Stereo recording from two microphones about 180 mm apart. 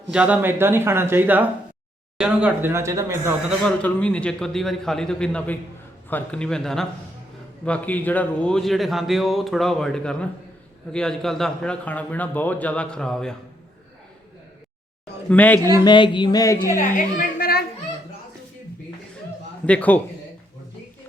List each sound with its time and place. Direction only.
0.1 s a man's voice: 5° right (ahead or behind)
3.6 s a man's voice: 5° left (ahead or behind)
15.3 s a man's voice: 10° left (ahead or behind)
15.7 s speech: 25° left (ahead or behind)
16.7 s a woman's voice: 50° left (ahead or behind)
19.6 s a man's voice: 10° left (ahead or behind)